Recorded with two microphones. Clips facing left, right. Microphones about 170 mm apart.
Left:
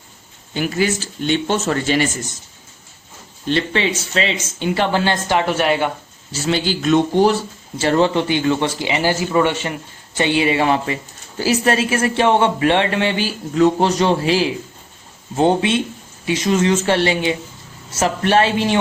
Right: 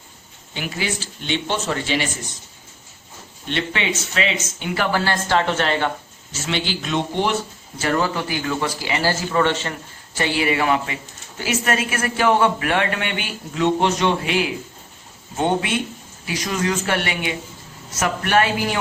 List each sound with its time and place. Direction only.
0.5 s speech: 45° left (ahead or behind)
3.4 s speech: 35° left (ahead or behind); by 5.9 s 10° left (ahead or behind)
6.3 s speech: 40° left (ahead or behind)
7.8 s speech: 25° left (ahead or behind)